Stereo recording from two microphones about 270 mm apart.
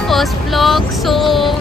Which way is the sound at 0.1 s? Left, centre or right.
Centre.